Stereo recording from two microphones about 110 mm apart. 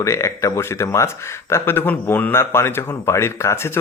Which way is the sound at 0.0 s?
25° left (ahead or behind).